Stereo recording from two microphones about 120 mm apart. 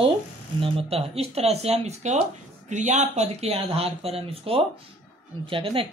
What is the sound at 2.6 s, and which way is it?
Speech, 85° right.